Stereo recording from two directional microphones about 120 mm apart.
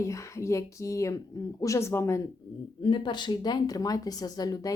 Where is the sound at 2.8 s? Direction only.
40° left (ahead or behind).